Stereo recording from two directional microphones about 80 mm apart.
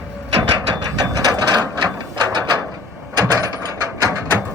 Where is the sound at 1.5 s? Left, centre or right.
Right.